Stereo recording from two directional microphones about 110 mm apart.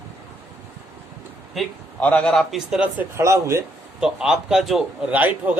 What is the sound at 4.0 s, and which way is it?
Speech, 5° right (ahead or behind).